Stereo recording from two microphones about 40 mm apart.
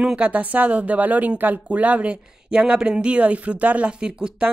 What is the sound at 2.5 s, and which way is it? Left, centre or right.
Speech, right.